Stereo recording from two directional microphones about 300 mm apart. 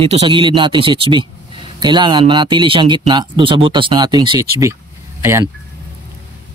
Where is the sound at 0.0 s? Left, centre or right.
Centre.